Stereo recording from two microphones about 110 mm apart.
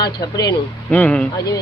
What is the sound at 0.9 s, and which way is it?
Speech, 10° left (ahead or behind).